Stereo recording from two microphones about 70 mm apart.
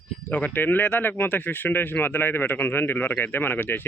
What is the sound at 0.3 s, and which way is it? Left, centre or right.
Speech, left.